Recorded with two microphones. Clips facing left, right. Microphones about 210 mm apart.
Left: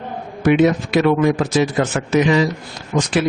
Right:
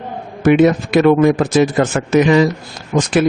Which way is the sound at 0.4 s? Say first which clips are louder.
Right 3 dB; 50° right (ahead or behind).